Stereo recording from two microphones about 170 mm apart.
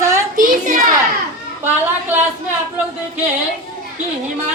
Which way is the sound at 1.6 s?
10° right (ahead or behind).